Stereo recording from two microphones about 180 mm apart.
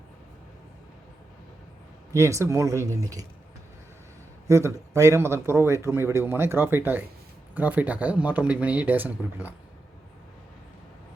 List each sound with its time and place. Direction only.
2.1 s a man's voice: 15° right (ahead or behind)
4.4 s a man's voice: 15° right (ahead or behind)